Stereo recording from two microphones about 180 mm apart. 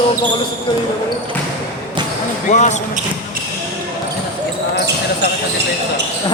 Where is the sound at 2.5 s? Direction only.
40° left (ahead or behind).